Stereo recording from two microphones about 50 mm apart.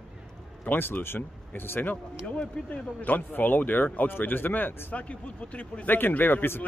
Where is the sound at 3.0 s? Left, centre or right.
Left.